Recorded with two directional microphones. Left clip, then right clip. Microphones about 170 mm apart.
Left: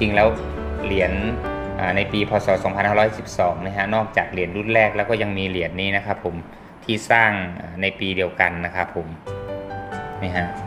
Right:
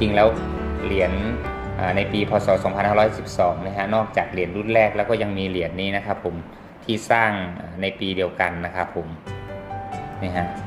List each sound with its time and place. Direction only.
0.0 s a man's voice: 10° left (ahead or behind)